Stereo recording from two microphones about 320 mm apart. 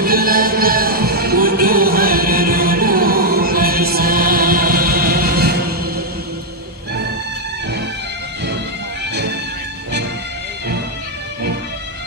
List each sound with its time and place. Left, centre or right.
0.0 s music: right